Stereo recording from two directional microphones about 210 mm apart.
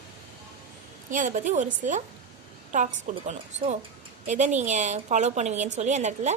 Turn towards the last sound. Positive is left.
turn(degrees=-35)  # may be behind; listen again after turning